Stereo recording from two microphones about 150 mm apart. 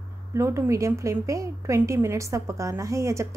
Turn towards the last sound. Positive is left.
turn(degrees=-20)  # may be behind; listen again after turning